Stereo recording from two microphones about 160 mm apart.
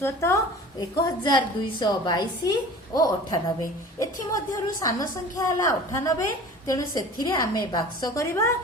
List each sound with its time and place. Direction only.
0.0 s a woman's voice: 15° left (ahead or behind)
1.0 s a woman's voice: 25° left (ahead or behind)